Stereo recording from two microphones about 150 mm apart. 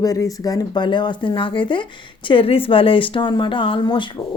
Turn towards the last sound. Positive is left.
turn(degrees=35)  # may be behind; listen again after turning